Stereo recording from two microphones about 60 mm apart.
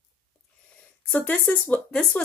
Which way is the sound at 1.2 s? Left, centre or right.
Left.